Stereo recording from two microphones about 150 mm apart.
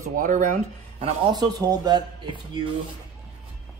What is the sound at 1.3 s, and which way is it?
Speech, 25° right (ahead or behind).